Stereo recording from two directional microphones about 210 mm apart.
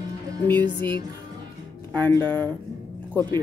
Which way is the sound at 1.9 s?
10° left (ahead or behind).